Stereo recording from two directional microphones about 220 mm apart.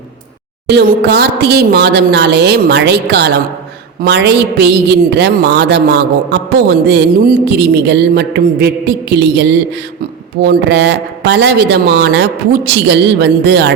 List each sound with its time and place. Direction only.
0.7 s speech: 45° right (ahead or behind)